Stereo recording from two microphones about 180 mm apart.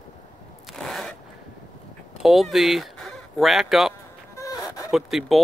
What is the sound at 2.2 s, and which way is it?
Speech, centre (ahead or behind).